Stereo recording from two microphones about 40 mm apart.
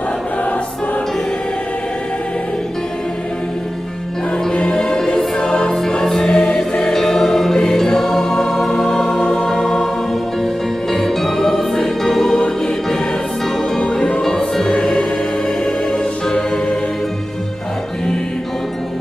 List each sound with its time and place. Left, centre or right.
4.5 s choir: centre
5.0 s music: centre
6.8 s music: centre
10.9 s music: centre
14.2 s music: centre